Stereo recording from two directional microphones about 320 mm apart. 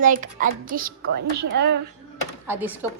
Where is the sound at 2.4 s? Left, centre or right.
Centre.